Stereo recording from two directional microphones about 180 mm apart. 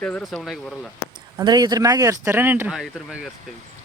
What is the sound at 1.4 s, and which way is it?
Speech, 20° right (ahead or behind).